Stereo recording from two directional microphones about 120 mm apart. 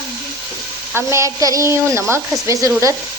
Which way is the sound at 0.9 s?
25° right (ahead or behind).